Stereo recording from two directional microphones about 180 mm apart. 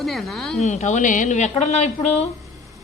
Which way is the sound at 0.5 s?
40° left (ahead or behind).